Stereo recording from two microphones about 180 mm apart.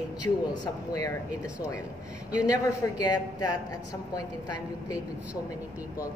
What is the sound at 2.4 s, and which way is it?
A woman's voice, 20° left (ahead or behind).